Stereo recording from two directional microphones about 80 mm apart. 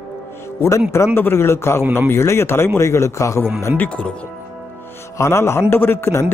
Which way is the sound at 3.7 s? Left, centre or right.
Centre.